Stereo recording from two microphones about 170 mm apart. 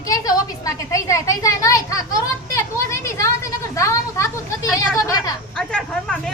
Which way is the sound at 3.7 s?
20° left (ahead or behind).